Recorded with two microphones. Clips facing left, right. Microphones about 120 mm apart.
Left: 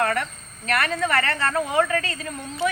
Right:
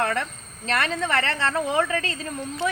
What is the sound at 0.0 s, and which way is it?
Speech, 25° right (ahead or behind).